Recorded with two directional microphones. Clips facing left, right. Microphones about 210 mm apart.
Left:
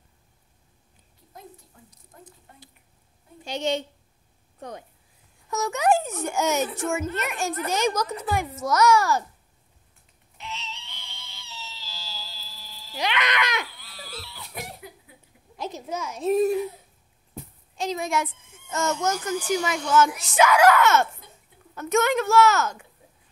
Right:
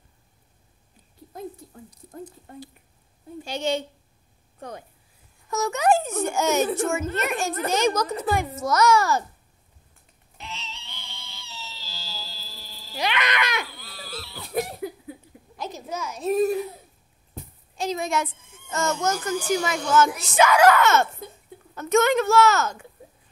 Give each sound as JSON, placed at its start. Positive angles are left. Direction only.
{"t": 3.4, "sound": "a child's voice", "side_deg": 20}
{"t": 5.5, "sound": "speech", "side_deg": 15}
{"t": 10.3, "sound": "a sound", "side_deg": -35}
{"t": 12.9, "sound": "speech", "side_deg": 15}
{"t": 13.7, "sound": "a sound", "side_deg": -35}
{"t": 15.5, "sound": "a child's voice", "side_deg": 25}
{"t": 17.7, "sound": "speech", "side_deg": 15}